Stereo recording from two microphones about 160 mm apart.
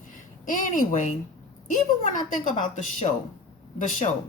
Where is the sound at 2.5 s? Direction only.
50° left (ahead or behind).